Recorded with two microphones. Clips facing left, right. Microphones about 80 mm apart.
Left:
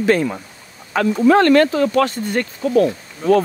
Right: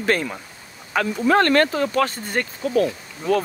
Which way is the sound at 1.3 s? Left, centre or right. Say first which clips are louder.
Left 1 dB; right.